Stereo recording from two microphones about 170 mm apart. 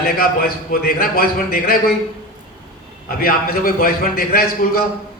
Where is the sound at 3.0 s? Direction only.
60° left (ahead or behind).